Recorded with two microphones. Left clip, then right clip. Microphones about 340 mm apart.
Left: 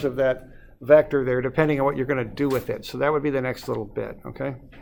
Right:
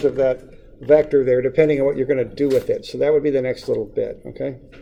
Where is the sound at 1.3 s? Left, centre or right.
Left.